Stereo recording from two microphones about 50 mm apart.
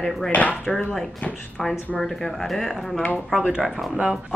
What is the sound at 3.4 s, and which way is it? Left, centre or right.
Speech, right.